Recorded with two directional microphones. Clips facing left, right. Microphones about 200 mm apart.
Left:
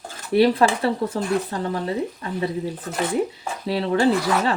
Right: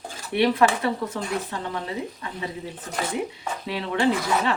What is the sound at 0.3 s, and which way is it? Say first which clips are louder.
Speech: left 3 dB; 35° left (ahead or behind).